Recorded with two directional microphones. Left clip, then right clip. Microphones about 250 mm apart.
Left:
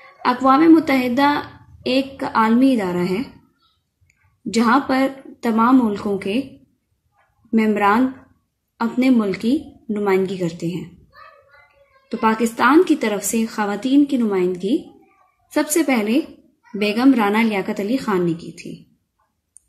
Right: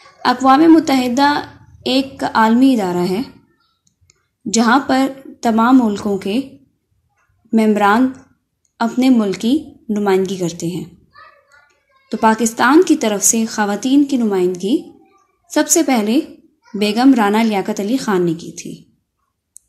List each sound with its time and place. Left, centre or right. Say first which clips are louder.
0.2 s a woman's voice: right 3 dB; centre
4.5 s a woman's voice: right 3 dB; centre
7.5 s a woman's voice: right 3 dB; centre
12.1 s a woman's voice: right 4 dB; centre